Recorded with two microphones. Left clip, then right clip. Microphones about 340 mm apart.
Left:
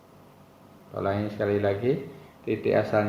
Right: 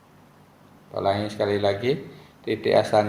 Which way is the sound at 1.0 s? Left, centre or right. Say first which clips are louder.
Right 4 dB; right.